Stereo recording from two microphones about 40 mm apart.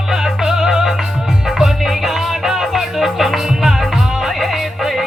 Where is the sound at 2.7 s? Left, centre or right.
Centre.